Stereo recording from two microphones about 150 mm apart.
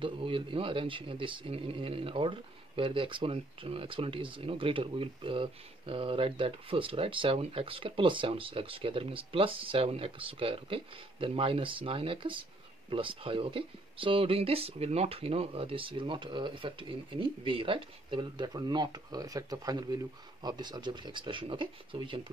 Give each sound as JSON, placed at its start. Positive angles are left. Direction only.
{"t": 0.0, "sound": "speech", "side_deg": -35}